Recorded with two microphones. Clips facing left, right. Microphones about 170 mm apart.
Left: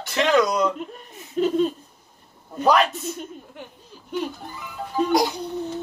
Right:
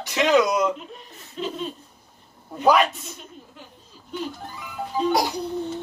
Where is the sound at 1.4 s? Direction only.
50° left (ahead or behind).